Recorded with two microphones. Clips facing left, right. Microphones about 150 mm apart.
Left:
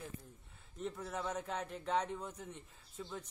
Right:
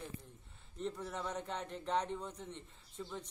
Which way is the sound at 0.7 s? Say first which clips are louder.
Even; 5° left (ahead or behind).